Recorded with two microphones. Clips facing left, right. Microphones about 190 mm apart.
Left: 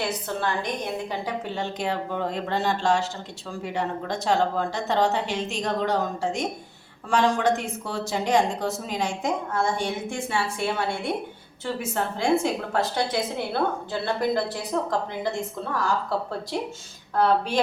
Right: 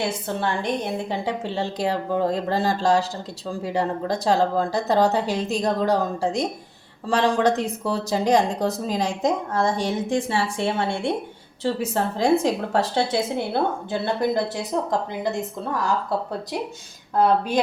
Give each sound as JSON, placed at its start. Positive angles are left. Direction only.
{"t": 0.0, "sound": "a woman's voice", "side_deg": -25}
{"t": 14.0, "sound": "a woman's voice", "side_deg": -20}